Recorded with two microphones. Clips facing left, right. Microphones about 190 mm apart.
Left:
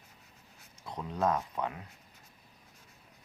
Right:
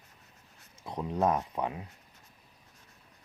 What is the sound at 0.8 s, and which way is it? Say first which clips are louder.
Speech: right 3 dB; 25° right (ahead or behind).